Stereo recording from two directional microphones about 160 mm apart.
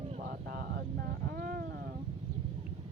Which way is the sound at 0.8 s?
75° right (ahead or behind).